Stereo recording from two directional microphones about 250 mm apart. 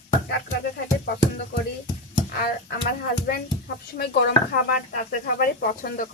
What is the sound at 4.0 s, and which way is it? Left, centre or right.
Speech, left.